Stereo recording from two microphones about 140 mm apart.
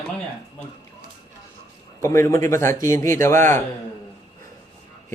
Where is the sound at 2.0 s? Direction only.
20° left (ahead or behind).